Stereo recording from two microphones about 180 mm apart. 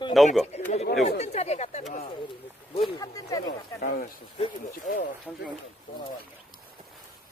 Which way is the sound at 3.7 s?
50° left (ahead or behind).